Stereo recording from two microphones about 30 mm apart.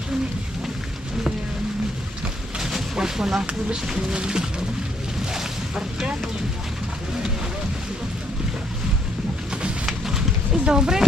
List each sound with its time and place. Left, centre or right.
2.9 s speech: centre
4.1 s music: right
5.3 s boat: centre
9.5 s a sound: right
9.8 s clip-clop: centre